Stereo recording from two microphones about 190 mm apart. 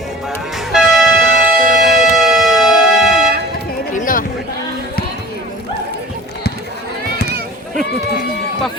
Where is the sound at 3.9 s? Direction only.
45° left (ahead or behind).